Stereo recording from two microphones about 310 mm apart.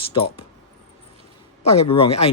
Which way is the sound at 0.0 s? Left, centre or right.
Centre.